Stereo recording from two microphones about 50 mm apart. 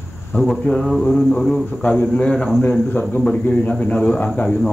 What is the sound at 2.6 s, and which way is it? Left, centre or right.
Speech, left.